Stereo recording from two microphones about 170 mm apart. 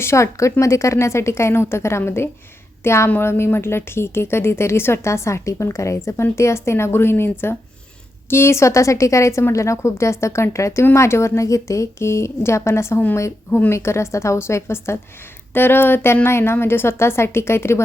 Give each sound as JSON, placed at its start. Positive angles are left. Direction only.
{"t": 0.0, "sound": "a woman's voice", "side_deg": 15}